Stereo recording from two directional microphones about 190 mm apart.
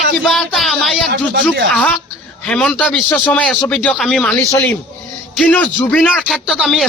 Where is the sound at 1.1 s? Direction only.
50° right (ahead or behind).